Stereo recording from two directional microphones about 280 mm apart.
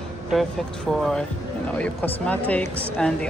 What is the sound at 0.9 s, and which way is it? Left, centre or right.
Speech, centre.